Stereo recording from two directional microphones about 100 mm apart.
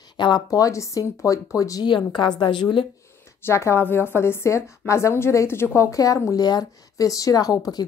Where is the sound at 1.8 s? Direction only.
50° left (ahead or behind).